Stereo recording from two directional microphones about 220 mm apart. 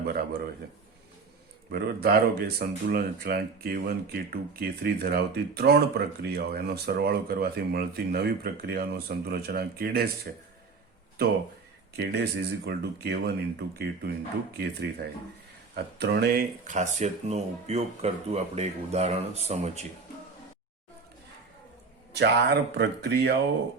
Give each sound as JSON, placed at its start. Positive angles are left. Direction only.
{"t": 1.7, "sound": "speech", "side_deg": -45}
{"t": 11.9, "sound": "speech", "side_deg": -45}
{"t": 16.6, "sound": "speech", "side_deg": -35}
{"t": 22.1, "sound": "speech", "side_deg": -50}